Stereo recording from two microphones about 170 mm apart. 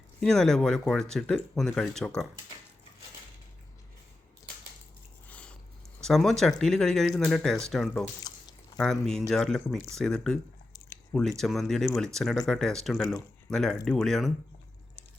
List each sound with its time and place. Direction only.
0.3 s speech: 5° left (ahead or behind)
5.3 s biting: 5° left (ahead or behind)
6.0 s speech: centre (ahead or behind)
8.3 s a sound: 25° left (ahead or behind)
8.8 s speech: 5° left (ahead or behind)